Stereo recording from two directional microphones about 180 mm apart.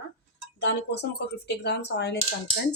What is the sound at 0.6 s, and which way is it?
Speech, 70° left (ahead or behind).